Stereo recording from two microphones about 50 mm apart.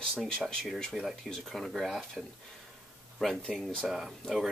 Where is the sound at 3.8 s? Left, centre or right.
Centre.